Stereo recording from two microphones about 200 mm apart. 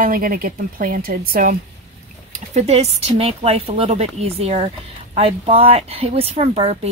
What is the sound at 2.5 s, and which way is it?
Speech, 30° right (ahead or behind).